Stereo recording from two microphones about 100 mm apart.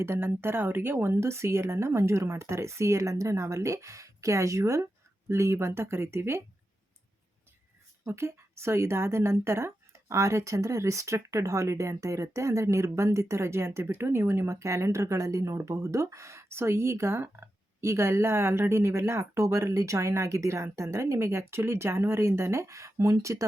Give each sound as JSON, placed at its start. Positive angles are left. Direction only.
{"t": 0.0, "sound": "a woman's voice", "side_deg": -25}
{"t": 8.0, "sound": "a woman's voice", "side_deg": -25}